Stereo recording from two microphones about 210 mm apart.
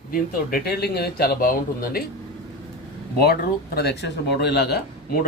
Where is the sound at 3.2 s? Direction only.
45° left (ahead or behind).